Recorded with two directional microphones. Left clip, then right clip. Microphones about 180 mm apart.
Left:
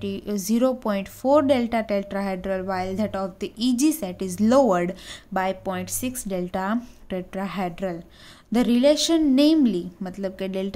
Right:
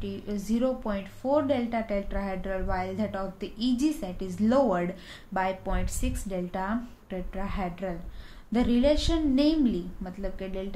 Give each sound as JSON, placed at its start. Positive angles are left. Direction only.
{"t": 0.0, "sound": "a woman's voice", "side_deg": 45}